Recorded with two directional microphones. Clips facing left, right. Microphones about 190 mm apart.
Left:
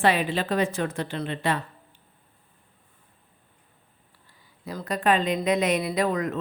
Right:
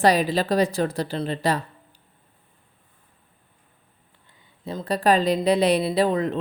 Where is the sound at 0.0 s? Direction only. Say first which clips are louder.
Right 4 dB; 40° right (ahead or behind).